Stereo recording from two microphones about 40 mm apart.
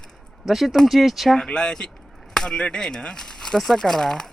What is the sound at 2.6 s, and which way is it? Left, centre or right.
Speech, centre.